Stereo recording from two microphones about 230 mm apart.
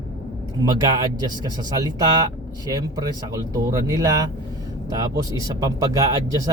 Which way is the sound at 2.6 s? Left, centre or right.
Centre.